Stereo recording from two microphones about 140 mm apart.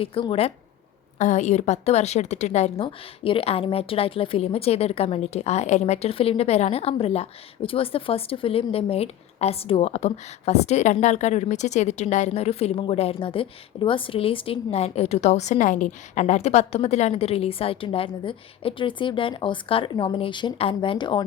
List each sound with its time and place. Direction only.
0.0 s speech: 40° left (ahead or behind)
1.2 s a woman's voice: 60° left (ahead or behind)
2.8 s a woman's voice: 40° left (ahead or behind)